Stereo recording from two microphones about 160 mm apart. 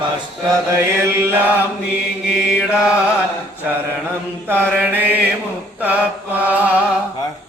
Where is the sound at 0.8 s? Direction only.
15° right (ahead or behind).